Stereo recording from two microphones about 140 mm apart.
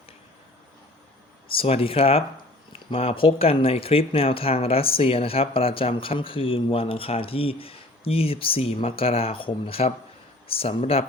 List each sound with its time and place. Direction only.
1.5 s speech: 45° left (ahead or behind)